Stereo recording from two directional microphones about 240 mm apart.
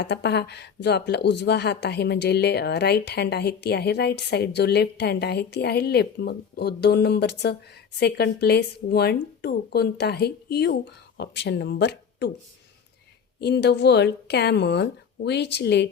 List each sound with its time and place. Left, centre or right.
0.0 s speech: left
13.4 s speech: left